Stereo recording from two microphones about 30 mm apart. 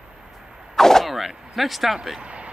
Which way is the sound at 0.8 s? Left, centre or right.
Centre.